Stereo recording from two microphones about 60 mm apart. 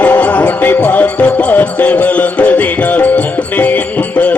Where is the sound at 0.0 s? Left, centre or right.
Left.